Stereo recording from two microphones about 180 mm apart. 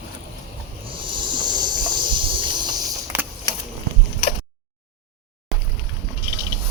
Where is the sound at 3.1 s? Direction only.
10° right (ahead or behind).